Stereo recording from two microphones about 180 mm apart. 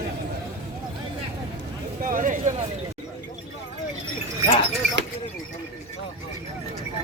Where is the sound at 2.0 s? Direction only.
50° right (ahead or behind).